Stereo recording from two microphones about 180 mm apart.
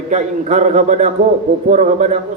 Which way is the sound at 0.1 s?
40° right (ahead or behind).